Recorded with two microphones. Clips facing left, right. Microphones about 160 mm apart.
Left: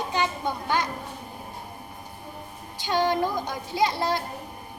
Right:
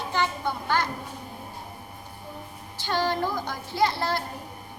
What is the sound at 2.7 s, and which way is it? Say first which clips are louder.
A child's voice: left 3 dB; 15° left (ahead or behind).